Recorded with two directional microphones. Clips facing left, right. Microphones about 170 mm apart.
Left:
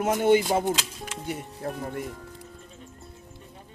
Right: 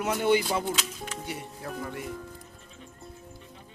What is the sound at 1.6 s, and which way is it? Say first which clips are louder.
Speech: left 5 dB; 40° left (ahead or behind).